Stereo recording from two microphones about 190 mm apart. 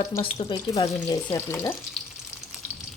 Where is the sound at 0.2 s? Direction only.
30° left (ahead or behind).